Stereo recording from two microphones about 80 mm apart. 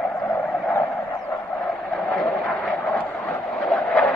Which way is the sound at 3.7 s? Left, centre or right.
Centre.